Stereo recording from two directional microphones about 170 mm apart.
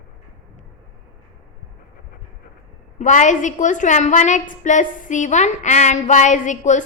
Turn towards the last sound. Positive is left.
turn(degrees=45)  # may be behind; listen again after turning